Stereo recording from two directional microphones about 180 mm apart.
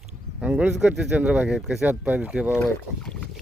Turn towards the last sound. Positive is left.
turn(degrees=5)  # may be behind; listen again after turning